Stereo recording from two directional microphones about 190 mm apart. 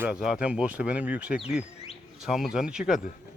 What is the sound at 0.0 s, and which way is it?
Speech, 5° right (ahead or behind).